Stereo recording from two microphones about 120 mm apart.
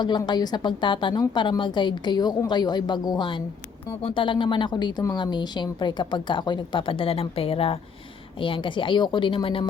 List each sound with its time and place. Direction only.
0.2 s speech: 35° left (ahead or behind)